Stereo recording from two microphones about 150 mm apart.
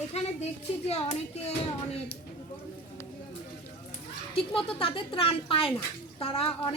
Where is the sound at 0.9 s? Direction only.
45° left (ahead or behind).